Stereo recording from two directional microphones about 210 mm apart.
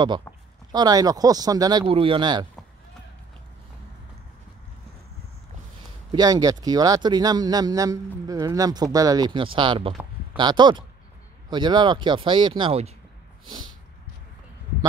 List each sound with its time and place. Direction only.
0.7 s speech: 20° right (ahead or behind)
6.1 s speech: 20° right (ahead or behind)